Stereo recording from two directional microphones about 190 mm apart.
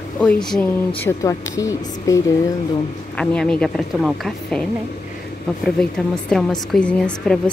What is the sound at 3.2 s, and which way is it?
A woman's voice, 5° left (ahead or behind).